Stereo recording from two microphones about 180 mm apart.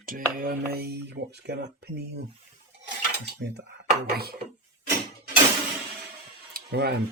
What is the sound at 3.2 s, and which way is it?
Speech, 70° right (ahead or behind).